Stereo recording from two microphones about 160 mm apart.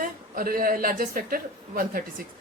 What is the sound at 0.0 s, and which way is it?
A woman's voice, 65° right (ahead or behind).